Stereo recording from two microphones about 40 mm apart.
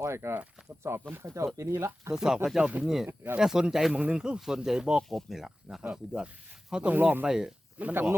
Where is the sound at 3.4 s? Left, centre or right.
Centre.